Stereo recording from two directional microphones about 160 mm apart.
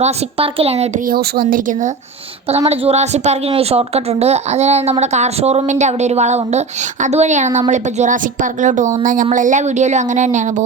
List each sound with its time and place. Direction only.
0.0 s a woman's voice: 35° right (ahead or behind)
1.0 s speech: 65° right (ahead or behind)
2.5 s a woman's voice: 40° right (ahead or behind)